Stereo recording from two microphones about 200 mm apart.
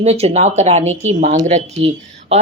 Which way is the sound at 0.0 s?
30° right (ahead or behind).